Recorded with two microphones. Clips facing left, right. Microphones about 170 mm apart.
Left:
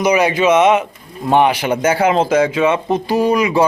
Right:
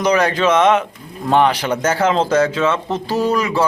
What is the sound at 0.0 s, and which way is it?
Speech, 10° left (ahead or behind).